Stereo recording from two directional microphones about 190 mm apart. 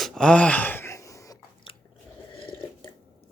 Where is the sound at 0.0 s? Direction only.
Centre (ahead or behind); by 1.7 s 20° left (ahead or behind).